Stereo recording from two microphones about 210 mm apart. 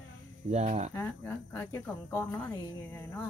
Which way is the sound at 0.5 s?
30° right (ahead or behind).